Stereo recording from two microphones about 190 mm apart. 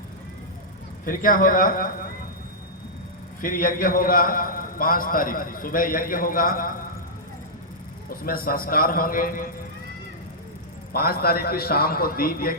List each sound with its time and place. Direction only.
1.0 s a man's voice: 45° left (ahead or behind)
3.4 s a man's voice: 45° left (ahead or behind)
8.1 s a man's voice: 50° left (ahead or behind)
10.9 s a man's voice: 55° left (ahead or behind)